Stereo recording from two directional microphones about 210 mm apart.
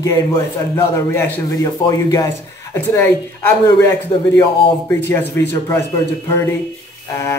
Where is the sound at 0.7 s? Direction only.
10° left (ahead or behind).